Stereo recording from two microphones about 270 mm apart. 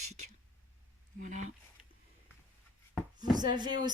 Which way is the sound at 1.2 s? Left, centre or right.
Right.